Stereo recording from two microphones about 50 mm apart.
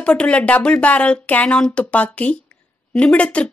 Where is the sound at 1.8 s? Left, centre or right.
Left.